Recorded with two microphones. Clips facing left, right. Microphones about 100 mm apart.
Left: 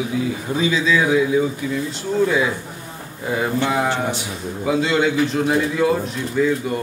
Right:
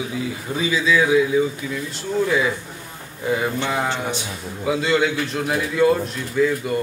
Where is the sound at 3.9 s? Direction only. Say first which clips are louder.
Left 3 dB; 20° right (ahead or behind).